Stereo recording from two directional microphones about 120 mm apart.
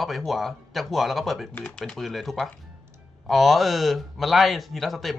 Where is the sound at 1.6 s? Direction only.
15° left (ahead or behind).